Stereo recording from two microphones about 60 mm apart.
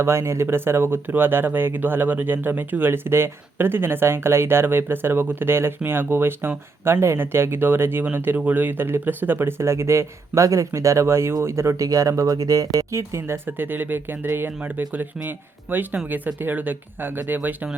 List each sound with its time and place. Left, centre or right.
0.0 s speech: right
11.9 s speech: right